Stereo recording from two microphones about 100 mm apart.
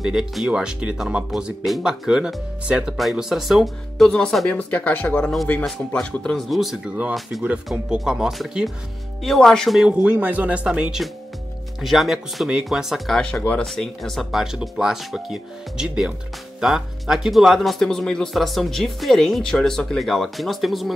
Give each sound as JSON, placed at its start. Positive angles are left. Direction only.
{"t": 0.0, "sound": "speech", "side_deg": -5}
{"t": 5.5, "sound": "speech", "side_deg": 5}
{"t": 7.4, "sound": "speech", "side_deg": -10}
{"t": 13.7, "sound": "speech", "side_deg": 0}